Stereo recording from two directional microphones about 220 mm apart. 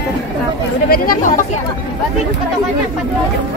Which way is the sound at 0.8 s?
40° left (ahead or behind).